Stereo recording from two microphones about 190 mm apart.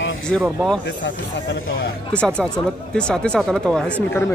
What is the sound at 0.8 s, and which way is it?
Speech, 65° left (ahead or behind).